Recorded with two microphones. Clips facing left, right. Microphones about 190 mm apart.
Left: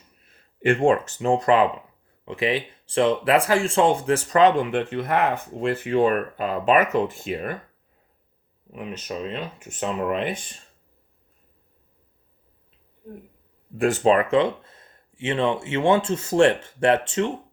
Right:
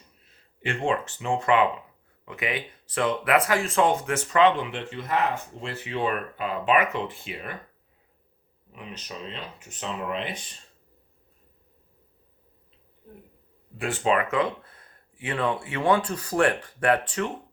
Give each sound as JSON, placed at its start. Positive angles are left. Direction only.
{"t": 0.6, "sound": "speech", "side_deg": 50}
{"t": 8.7, "sound": "speech", "side_deg": 50}
{"t": 13.7, "sound": "speech", "side_deg": 45}